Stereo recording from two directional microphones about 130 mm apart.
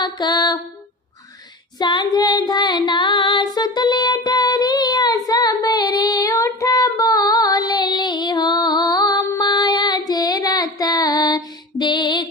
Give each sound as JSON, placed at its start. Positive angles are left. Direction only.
{"t": 0.0, "sound": "mantra", "side_deg": 35}
{"t": 1.8, "sound": "female singing", "side_deg": 35}